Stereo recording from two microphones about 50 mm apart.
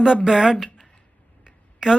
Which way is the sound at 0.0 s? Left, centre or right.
Centre.